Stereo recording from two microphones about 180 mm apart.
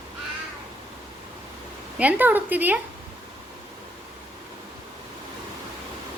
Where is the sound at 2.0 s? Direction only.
10° right (ahead or behind).